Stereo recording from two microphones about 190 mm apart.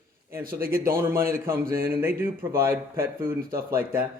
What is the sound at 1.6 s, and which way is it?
Speech, 50° right (ahead or behind).